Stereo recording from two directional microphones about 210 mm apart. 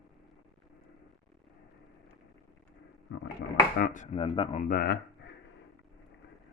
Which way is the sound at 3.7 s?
40° left (ahead or behind).